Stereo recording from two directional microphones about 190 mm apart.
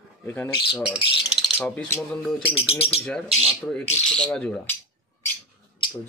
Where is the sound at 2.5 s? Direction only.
30° left (ahead or behind).